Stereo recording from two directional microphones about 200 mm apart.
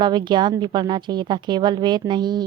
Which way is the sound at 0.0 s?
20° right (ahead or behind).